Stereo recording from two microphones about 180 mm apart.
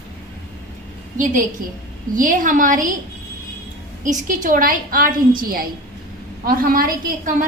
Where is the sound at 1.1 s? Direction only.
45° right (ahead or behind).